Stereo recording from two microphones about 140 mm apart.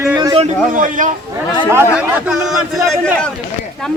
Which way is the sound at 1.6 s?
15° right (ahead or behind).